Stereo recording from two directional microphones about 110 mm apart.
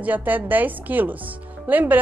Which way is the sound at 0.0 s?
15° right (ahead or behind).